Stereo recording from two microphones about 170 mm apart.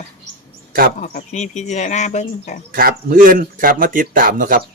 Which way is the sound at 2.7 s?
60° right (ahead or behind).